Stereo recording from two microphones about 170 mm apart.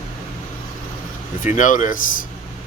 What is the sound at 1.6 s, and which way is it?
Speech, 50° left (ahead or behind).